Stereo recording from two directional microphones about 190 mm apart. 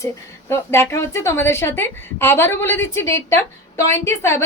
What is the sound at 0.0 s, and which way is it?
A woman's voice, 15° left (ahead or behind).